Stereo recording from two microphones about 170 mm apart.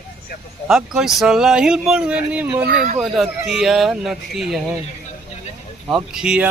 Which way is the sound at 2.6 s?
55° right (ahead or behind).